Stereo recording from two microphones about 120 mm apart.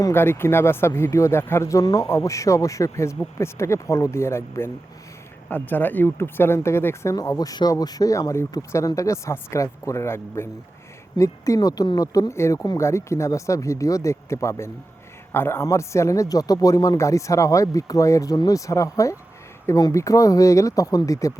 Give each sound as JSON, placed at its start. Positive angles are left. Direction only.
{"t": 0.0, "sound": "speech", "side_deg": 20}